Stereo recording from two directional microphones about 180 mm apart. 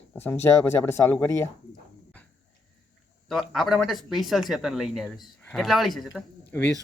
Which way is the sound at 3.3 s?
Centre (ahead or behind).